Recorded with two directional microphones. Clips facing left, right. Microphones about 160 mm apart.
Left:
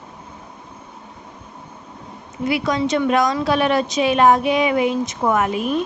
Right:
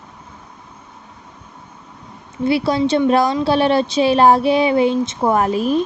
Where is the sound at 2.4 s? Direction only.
30° right (ahead or behind).